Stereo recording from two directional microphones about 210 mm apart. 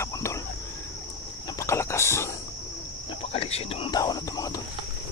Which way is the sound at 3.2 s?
30° left (ahead or behind).